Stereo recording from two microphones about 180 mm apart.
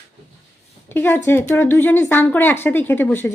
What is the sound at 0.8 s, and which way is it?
Speech, 10° left (ahead or behind).